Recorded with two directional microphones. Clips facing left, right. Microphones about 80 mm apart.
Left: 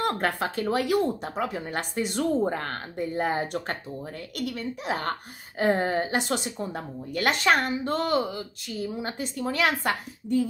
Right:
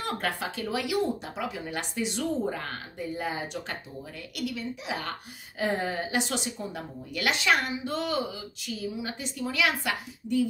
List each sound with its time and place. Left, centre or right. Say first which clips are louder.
0.0 s a woman's voice: left 5 dB; left